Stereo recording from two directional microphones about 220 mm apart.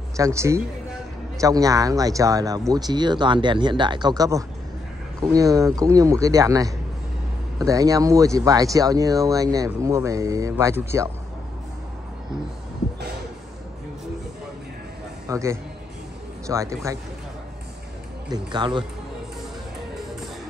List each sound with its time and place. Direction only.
0.2 s speech: 15° right (ahead or behind)
15.2 s speech: 15° right (ahead or behind)
18.3 s speech: 20° right (ahead or behind)